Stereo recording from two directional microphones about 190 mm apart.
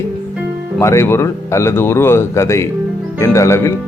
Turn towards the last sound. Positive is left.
turn(degrees=15)  # may be behind; listen again after turning